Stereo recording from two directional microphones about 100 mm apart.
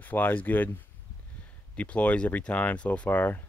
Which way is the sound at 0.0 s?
20° left (ahead or behind).